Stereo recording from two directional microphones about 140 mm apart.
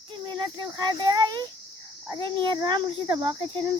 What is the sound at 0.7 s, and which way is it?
Speech, 30° right (ahead or behind).